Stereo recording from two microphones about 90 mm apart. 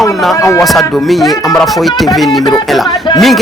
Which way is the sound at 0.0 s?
Centre (ahead or behind).